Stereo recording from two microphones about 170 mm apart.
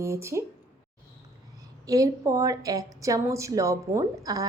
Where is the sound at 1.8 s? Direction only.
20° right (ahead or behind).